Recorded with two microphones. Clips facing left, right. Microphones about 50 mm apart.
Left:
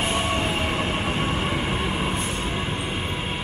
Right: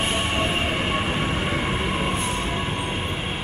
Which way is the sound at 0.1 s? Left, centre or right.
Right.